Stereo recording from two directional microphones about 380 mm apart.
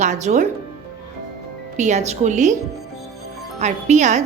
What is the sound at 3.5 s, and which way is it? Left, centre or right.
Speech, centre.